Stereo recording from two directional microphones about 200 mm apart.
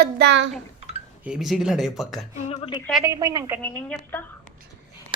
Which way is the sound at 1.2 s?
5° right (ahead or behind).